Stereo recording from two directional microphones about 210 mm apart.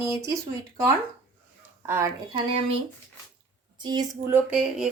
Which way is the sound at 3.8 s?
20° right (ahead or behind).